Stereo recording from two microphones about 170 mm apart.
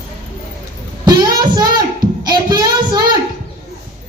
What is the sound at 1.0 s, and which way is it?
Child singing, 25° right (ahead or behind).